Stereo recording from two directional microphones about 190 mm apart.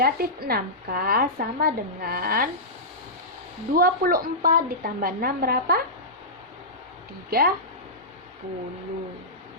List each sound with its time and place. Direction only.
0.0 s speech: 55° right (ahead or behind)
3.8 s speech: 50° right (ahead or behind)
7.3 s speech: 55° right (ahead or behind)